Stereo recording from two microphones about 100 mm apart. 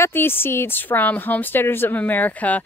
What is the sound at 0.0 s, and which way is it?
A woman's voice, 20° left (ahead or behind).